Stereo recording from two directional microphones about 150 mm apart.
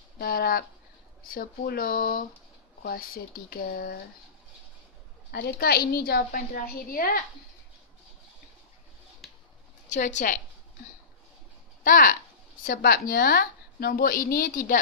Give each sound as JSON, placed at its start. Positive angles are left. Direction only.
{"t": 0.2, "sound": "a woman's voice", "side_deg": 90}
{"t": 1.2, "sound": "a woman's voice", "side_deg": 70}
{"t": 5.3, "sound": "a woman's voice", "side_deg": 90}
{"t": 9.2, "sound": "a sound", "side_deg": 0}
{"t": 9.8, "sound": "a woman's voice", "side_deg": 55}
{"t": 11.8, "sound": "a woman's voice", "side_deg": 65}